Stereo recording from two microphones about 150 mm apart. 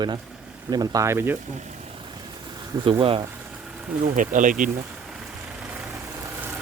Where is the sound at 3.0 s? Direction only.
35° right (ahead or behind).